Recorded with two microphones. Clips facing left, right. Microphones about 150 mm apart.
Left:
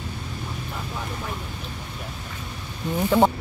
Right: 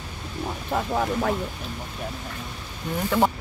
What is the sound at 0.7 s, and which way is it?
Speech, 65° right (ahead or behind).